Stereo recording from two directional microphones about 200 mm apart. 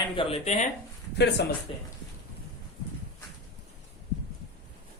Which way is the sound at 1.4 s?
55° left (ahead or behind).